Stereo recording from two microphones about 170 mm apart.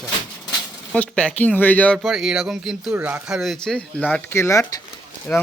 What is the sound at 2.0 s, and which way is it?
Speech, 5° right (ahead or behind).